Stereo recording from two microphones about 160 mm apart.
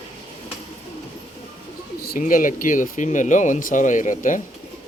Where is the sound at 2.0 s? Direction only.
65° left (ahead or behind).